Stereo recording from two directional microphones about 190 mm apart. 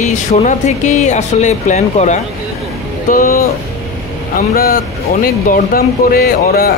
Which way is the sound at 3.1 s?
50° left (ahead or behind).